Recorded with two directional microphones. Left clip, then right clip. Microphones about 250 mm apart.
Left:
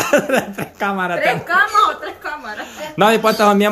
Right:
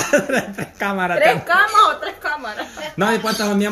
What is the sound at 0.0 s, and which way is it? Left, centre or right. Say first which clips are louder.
A man's voice: left 2 dB; centre.